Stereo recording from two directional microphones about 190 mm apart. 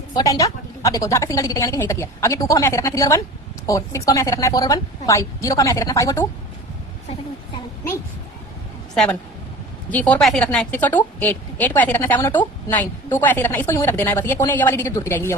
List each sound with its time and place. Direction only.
0.1 s a woman's voice: 20° left (ahead or behind)
9.9 s a woman's voice: 10° left (ahead or behind)